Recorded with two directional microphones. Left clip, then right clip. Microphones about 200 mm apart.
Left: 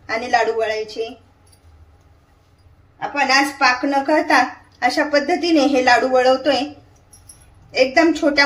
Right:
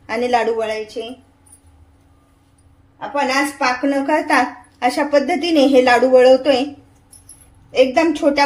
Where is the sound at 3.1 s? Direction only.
15° right (ahead or behind).